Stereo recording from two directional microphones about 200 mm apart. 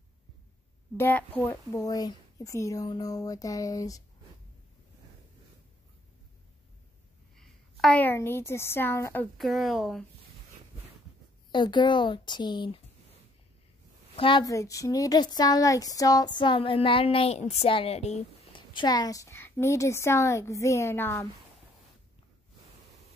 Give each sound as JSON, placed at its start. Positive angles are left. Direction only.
{"t": 0.9, "sound": "a woman's voice", "side_deg": 10}
{"t": 7.3, "sound": "a woman's voice", "side_deg": 5}
{"t": 11.5, "sound": "speech", "side_deg": 25}
{"t": 14.1, "sound": "speech", "side_deg": 25}